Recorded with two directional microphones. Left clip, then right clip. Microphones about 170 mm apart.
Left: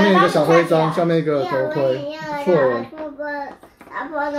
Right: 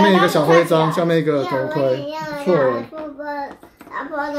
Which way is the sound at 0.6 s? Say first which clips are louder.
Right 1 dB; 45° right (ahead or behind).